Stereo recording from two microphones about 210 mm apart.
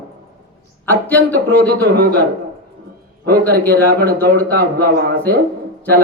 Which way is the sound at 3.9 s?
50° right (ahead or behind).